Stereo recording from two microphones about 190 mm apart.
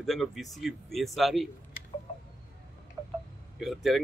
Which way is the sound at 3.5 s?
Centre (ahead or behind).